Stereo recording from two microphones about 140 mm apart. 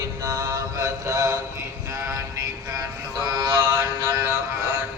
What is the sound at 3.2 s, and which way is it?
Mantra, 25° right (ahead or behind).